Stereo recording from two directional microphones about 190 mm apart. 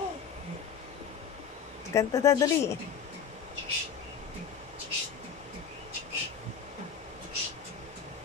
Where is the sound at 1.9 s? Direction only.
15° left (ahead or behind).